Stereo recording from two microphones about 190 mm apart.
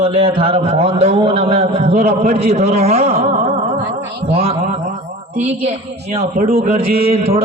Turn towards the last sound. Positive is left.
turn(degrees=-30)  # may be behind; listen again after turning